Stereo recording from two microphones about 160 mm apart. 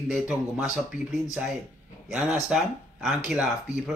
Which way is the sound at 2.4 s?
Centre (ahead or behind).